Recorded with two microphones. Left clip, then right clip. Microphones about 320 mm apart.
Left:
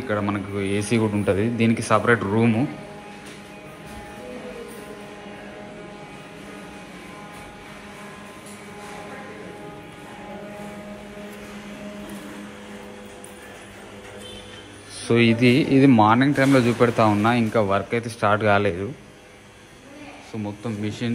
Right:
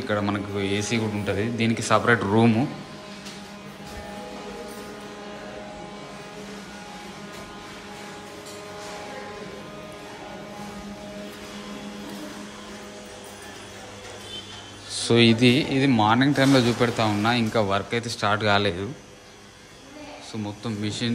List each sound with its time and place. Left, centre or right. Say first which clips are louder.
0.1 s speech: left 1 dB; centre
15.0 s speech: even; centre
20.4 s speech: left 2 dB; centre